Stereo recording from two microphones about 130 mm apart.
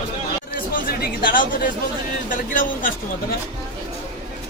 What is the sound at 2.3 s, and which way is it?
Speech, 90° left.